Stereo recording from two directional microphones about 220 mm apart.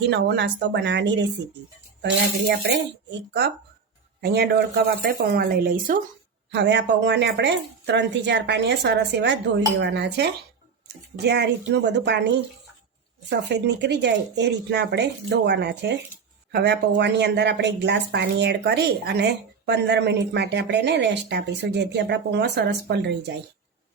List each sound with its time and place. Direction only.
0.1 s speech: 55° right (ahead or behind)
2.6 s speech: 50° right (ahead or behind)
6.5 s speech: 50° right (ahead or behind)
13.3 s speech: 50° right (ahead or behind)